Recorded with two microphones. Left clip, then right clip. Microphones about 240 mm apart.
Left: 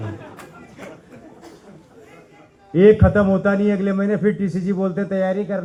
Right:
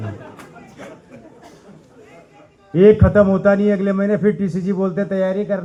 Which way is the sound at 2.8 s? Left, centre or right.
Right.